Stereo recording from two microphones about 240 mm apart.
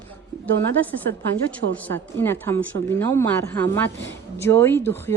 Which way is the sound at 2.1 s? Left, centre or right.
Centre.